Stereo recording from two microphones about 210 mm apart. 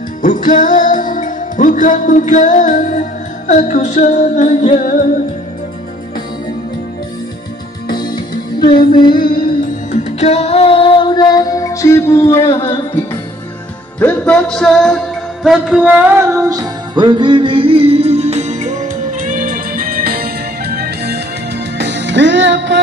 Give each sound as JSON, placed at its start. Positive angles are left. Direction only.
{"t": 0.2, "sound": "music", "side_deg": 40}
{"t": 8.1, "sound": "music", "side_deg": 45}
{"t": 8.7, "sound": "music", "side_deg": 20}
{"t": 9.1, "sound": "music", "side_deg": 45}
{"t": 10.2, "sound": "music", "side_deg": 30}
{"t": 12.4, "sound": "music", "side_deg": 25}
{"t": 13.9, "sound": "music", "side_deg": 5}